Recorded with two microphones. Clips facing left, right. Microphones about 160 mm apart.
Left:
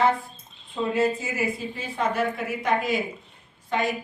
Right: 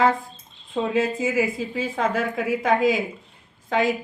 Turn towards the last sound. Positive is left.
turn(degrees=-90)